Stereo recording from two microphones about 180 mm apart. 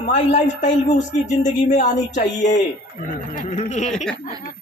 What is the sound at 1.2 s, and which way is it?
A man's voice, 40° left (ahead or behind).